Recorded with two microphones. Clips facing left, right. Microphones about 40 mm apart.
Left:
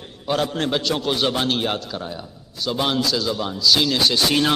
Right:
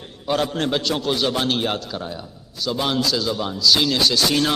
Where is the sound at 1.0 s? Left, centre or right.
Centre.